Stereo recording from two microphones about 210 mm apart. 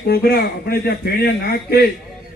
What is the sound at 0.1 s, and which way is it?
A man's voice, 45° left (ahead or behind).